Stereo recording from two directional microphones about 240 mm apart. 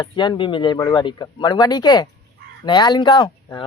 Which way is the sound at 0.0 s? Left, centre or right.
Centre.